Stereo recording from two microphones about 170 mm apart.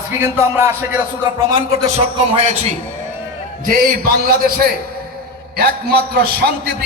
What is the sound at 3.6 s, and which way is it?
A man's voice, 55° right (ahead or behind).